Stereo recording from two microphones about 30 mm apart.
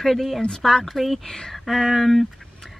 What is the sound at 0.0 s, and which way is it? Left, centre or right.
Speech, centre.